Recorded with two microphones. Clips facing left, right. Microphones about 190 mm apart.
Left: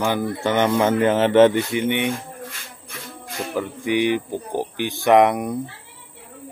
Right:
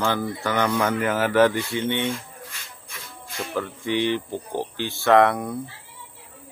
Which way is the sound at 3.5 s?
15° left (ahead or behind).